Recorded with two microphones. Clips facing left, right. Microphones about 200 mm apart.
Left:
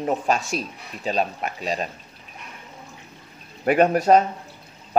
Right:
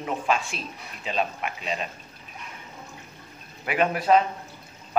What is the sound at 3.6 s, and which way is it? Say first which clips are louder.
Speech: left 7 dB; 45° left (ahead or behind).